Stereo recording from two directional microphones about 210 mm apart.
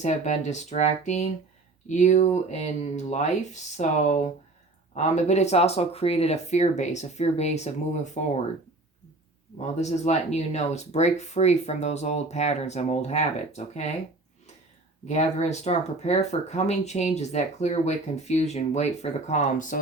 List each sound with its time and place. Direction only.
0.0 s speech: 35° left (ahead or behind)
9.8 s speech: 30° left (ahead or behind)
15.0 s speech: 30° left (ahead or behind)